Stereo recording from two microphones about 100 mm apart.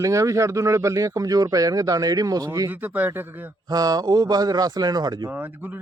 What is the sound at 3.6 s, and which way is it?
Speech, 40° right (ahead or behind).